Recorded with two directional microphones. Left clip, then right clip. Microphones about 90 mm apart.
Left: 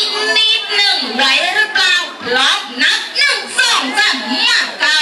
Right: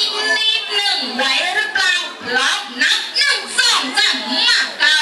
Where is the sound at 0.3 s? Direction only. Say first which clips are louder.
Left 6 dB; 15° left (ahead or behind).